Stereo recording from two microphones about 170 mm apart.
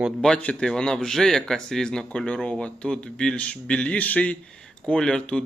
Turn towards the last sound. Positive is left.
turn(degrees=5)  # may be behind; listen again after turning